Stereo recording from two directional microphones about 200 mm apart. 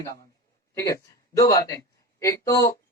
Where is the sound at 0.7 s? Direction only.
15° left (ahead or behind).